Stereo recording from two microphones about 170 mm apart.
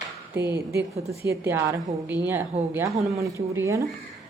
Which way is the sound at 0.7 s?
15° right (ahead or behind).